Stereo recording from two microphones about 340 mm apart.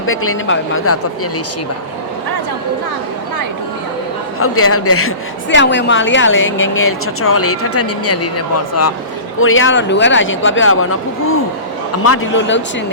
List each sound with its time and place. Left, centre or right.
0.0 s a woman's voice: left
4.4 s a woman's voice: left
12.0 s a woman's voice: left